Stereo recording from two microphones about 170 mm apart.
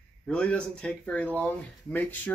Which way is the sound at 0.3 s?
5° left (ahead or behind).